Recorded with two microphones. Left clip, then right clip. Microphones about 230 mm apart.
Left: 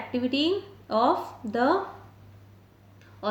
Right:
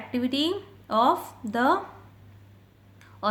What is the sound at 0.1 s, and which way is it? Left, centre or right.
Speech, right.